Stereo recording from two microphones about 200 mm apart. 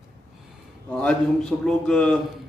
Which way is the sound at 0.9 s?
5° left (ahead or behind).